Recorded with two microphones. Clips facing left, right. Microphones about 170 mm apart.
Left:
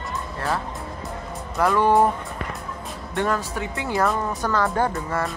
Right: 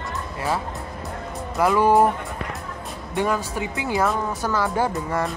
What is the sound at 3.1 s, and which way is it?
Speech, 5° right (ahead or behind).